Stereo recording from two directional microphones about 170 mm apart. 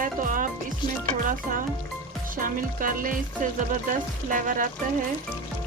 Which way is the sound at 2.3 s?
55° right (ahead or behind).